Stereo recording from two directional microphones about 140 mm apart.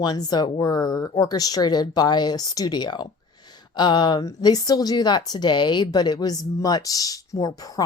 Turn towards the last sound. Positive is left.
turn(degrees=25)  # may be behind; listen again after turning